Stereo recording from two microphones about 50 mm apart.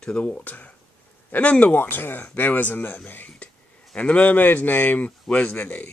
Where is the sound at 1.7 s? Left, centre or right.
Left.